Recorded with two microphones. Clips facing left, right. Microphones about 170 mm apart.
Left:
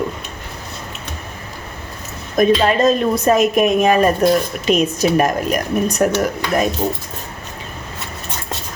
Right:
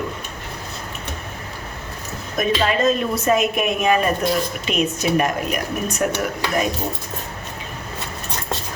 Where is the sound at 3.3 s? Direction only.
40° left (ahead or behind).